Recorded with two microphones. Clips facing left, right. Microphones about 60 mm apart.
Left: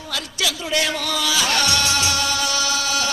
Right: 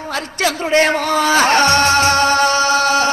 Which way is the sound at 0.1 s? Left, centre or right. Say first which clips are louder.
Right 6 dB; right.